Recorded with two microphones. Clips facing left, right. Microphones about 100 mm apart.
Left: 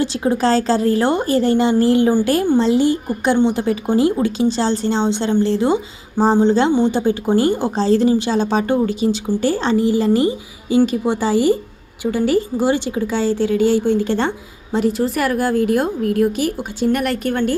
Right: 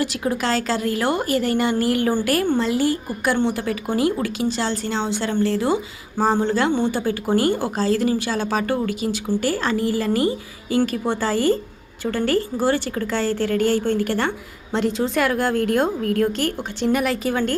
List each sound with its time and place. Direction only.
0.0 s a woman's voice: 25° left (ahead or behind)
15.2 s a woman's voice: 5° left (ahead or behind)
16.9 s speech: centre (ahead or behind)